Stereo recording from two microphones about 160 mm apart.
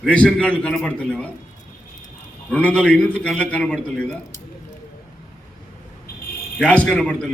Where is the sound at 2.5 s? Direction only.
5° left (ahead or behind).